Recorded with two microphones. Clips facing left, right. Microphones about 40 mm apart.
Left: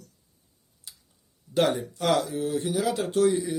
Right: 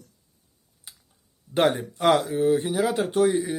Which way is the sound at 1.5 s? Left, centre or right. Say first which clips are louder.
Right 2 dB; right.